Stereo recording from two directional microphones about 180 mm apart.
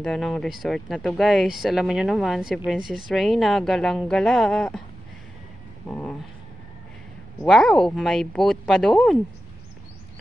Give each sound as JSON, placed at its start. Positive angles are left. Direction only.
{"t": 0.0, "sound": "speech", "side_deg": 0}
{"t": 5.9, "sound": "a sound", "side_deg": 5}
{"t": 7.4, "sound": "speech", "side_deg": 0}